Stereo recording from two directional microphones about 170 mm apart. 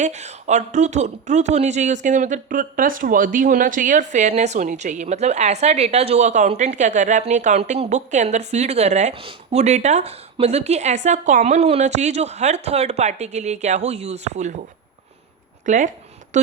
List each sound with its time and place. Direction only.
0.0 s speech: 45° right (ahead or behind)
15.6 s speech: 50° right (ahead or behind)